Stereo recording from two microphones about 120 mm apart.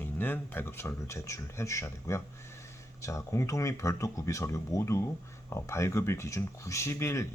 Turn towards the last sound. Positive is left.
turn(degrees=25)  # may be behind; listen again after turning